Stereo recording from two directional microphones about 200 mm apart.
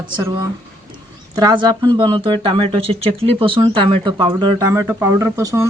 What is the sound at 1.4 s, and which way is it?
Speech, 20° right (ahead or behind).